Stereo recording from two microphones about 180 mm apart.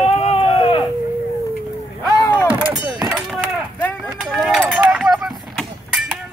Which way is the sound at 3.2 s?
Centre (ahead or behind).